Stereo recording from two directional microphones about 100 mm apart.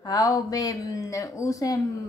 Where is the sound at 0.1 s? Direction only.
40° left (ahead or behind).